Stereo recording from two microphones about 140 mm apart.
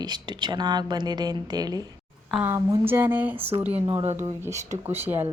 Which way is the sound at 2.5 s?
15° right (ahead or behind).